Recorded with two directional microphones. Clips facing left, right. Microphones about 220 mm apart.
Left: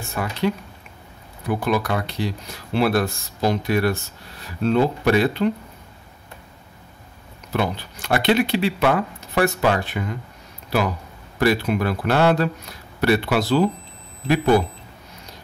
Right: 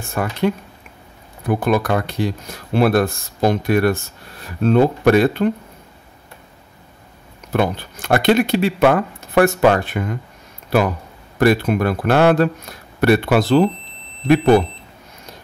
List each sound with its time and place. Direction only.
0.1 s speech: 50° right (ahead or behind)
7.5 s speech: 50° right (ahead or behind)
11.3 s speech: 50° right (ahead or behind)